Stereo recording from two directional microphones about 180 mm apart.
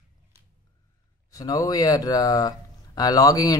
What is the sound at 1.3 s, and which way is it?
Speech, 20° left (ahead or behind).